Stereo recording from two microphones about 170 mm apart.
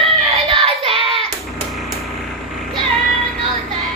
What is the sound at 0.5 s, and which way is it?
Child singing, 35° right (ahead or behind).